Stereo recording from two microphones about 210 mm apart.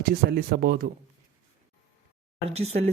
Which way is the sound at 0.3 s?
50° right (ahead or behind).